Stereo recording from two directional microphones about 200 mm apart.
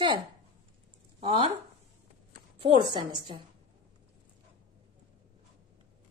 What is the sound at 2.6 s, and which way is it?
Speech, 25° right (ahead or behind).